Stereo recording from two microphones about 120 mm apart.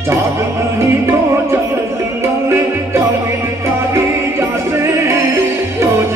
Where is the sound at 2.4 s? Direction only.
25° right (ahead or behind).